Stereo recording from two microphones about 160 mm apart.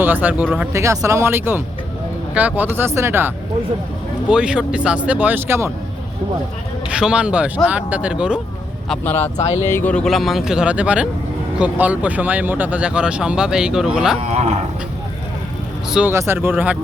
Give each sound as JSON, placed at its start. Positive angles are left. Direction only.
{"t": 0.0, "sound": "speech", "side_deg": -10}
{"t": 6.9, "sound": "speech", "side_deg": -5}
{"t": 8.9, "sound": "speech", "side_deg": 10}
{"t": 14.3, "sound": "speech", "side_deg": -45}
{"t": 15.9, "sound": "speech", "side_deg": -5}